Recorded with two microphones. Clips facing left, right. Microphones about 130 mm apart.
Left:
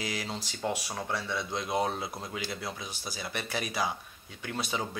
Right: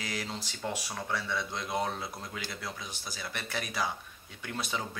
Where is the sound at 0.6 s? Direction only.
10° left (ahead or behind).